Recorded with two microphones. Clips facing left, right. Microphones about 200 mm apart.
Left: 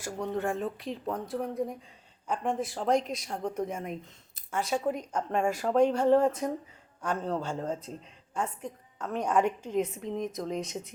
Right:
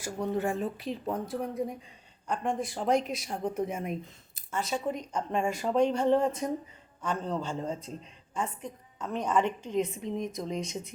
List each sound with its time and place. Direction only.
0.0 s speech: 5° right (ahead or behind)
4.5 s a woman's voice: 10° left (ahead or behind)